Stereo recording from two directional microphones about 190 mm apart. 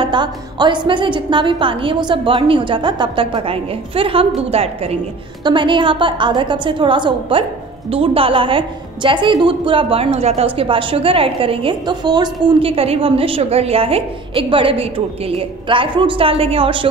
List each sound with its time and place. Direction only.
0.0 s a woman's voice: 25° right (ahead or behind)